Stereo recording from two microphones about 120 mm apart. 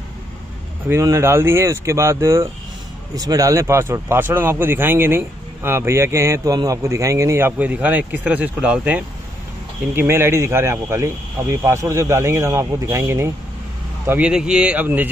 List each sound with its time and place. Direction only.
1.0 s speech: 20° right (ahead or behind)